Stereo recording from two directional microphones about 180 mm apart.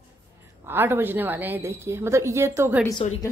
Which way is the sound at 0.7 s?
10° right (ahead or behind).